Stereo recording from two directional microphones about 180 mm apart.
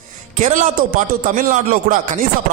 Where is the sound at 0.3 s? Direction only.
45° right (ahead or behind).